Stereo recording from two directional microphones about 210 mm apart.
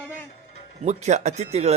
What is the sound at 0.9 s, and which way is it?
Speech, 35° right (ahead or behind).